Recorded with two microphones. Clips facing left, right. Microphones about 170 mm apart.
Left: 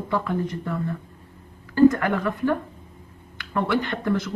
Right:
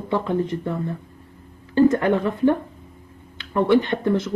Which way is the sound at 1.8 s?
25° right (ahead or behind).